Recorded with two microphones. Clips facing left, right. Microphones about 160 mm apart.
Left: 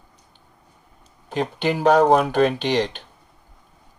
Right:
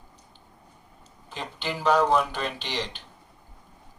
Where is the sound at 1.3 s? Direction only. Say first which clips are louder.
Left 11 dB; 55° left (ahead or behind).